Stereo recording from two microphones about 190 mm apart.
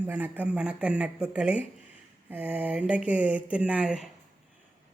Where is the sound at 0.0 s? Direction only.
10° right (ahead or behind).